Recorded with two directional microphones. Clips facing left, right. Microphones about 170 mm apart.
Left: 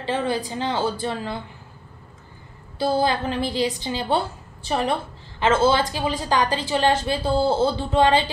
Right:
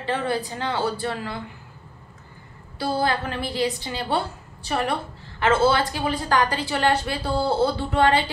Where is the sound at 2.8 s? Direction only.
20° left (ahead or behind).